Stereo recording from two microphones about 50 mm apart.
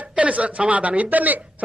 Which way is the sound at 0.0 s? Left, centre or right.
Right.